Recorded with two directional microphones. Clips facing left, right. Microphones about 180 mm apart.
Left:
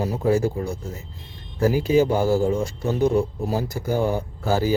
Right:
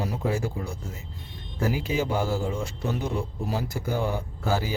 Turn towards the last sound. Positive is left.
turn(degrees=40)  # may be behind; listen again after turning